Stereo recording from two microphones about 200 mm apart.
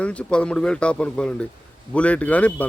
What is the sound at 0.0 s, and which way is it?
Speech, 5° left (ahead or behind).